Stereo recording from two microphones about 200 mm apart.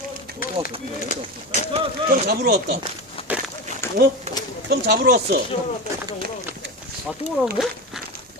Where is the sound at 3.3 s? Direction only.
5° right (ahead or behind).